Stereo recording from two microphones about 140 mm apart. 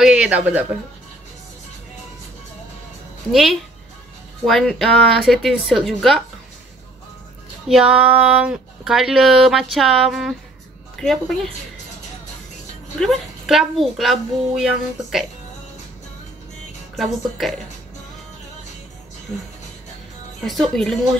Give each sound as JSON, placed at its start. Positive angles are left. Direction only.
{"t": 0.0, "sound": "a man's voice", "side_deg": -5}
{"t": 3.3, "sound": "speech", "side_deg": 0}
{"t": 7.6, "sound": "speech", "side_deg": -5}
{"t": 13.0, "sound": "speech", "side_deg": 0}
{"t": 16.9, "sound": "speech", "side_deg": 0}
{"t": 20.4, "sound": "speech", "side_deg": 0}